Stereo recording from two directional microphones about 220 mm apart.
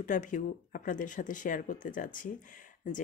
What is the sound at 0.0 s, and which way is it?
Speech, 35° left (ahead or behind).